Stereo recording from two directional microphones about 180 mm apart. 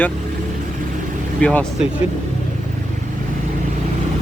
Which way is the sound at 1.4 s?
5° left (ahead or behind).